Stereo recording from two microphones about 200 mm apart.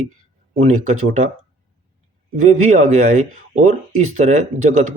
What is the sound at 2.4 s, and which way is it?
Speech, 35° right (ahead or behind).